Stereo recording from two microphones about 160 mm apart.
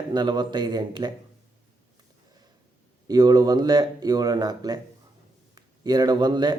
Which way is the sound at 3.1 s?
25° right (ahead or behind).